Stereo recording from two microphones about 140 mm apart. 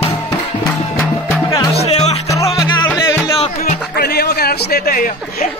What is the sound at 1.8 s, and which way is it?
Music, 50° left (ahead or behind).